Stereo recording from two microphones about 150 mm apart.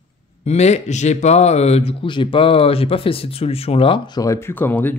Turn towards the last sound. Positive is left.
turn(degrees=10)  # may be behind; listen again after turning